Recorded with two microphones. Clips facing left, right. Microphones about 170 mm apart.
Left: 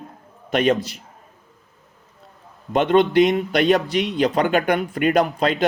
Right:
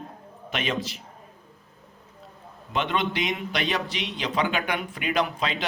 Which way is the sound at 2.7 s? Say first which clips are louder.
Left 11 dB; 45° left (ahead or behind).